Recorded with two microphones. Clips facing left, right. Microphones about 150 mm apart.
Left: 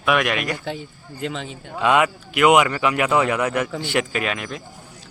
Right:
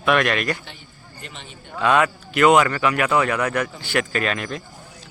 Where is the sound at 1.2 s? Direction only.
90° left.